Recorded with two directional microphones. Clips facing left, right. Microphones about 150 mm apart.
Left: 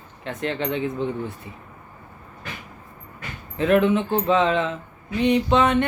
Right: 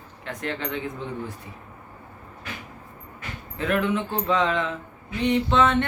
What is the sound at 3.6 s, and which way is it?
Speech, 20° left (ahead or behind).